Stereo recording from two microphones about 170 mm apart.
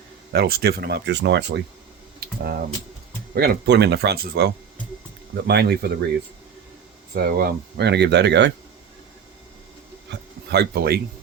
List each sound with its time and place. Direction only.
0.3 s speech: 65° right (ahead or behind); by 1.6 s 90° right
2.2 s speech: 65° right (ahead or behind)
3.3 s speech: 75° right (ahead or behind)
7.1 s speech: 65° right (ahead or behind); by 8.5 s 90° right
10.1 s a sound: 75° right (ahead or behind)